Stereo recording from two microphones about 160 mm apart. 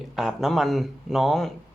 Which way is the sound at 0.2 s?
Centre (ahead or behind).